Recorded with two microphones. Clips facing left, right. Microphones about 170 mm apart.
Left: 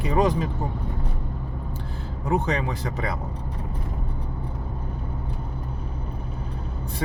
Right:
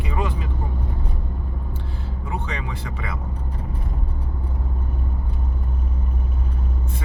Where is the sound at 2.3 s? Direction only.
40° left (ahead or behind).